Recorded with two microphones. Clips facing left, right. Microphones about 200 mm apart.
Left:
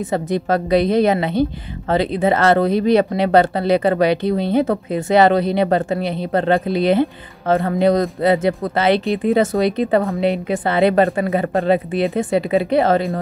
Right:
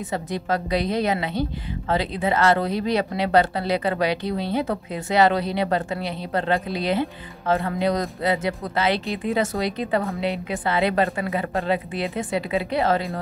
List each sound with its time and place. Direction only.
0.1 s a woman's voice: 55° left (ahead or behind)